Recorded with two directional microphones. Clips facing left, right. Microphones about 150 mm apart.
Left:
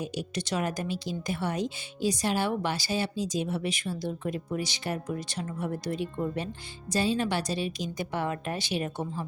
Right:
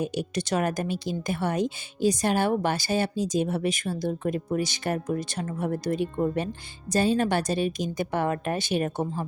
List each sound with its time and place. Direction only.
0.0 s speech: 55° right (ahead or behind)